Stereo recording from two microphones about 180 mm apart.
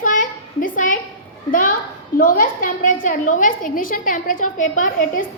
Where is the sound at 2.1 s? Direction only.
50° left (ahead or behind).